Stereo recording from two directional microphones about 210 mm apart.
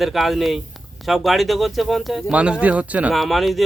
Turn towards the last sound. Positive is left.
turn(degrees=0)  # may be behind; listen again after turning